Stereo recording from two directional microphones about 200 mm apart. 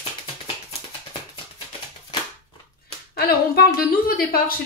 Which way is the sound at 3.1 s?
50° left (ahead or behind).